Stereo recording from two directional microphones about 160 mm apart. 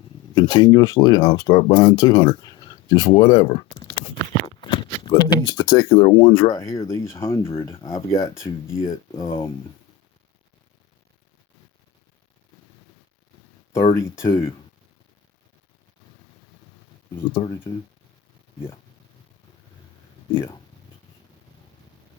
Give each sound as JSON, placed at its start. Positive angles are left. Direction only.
{"t": 0.3, "sound": "speech", "side_deg": 30}
{"t": 13.9, "sound": "speech", "side_deg": 20}
{"t": 17.3, "sound": "speech", "side_deg": 20}